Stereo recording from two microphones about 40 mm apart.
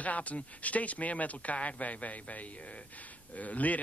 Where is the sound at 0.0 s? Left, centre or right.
Left.